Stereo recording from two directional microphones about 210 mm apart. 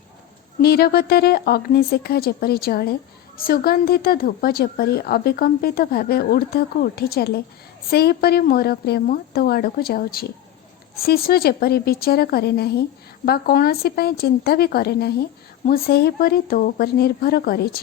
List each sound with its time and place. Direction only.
0.6 s speech: 45° left (ahead or behind)